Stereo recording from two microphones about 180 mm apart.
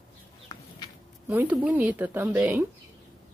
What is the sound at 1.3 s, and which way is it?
A woman's voice, 10° right (ahead or behind).